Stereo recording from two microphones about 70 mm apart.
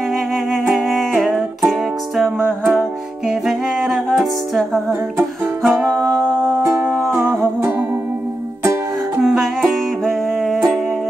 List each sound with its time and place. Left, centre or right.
0.5 s music: centre
7.1 s music: right
9.2 s music: centre